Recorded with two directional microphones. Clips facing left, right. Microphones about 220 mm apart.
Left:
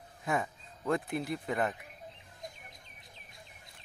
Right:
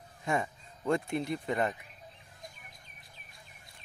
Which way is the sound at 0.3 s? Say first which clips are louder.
Right 1 dB; 5° left (ahead or behind).